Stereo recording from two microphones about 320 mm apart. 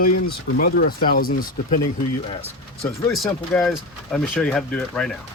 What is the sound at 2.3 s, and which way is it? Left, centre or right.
Speech, centre.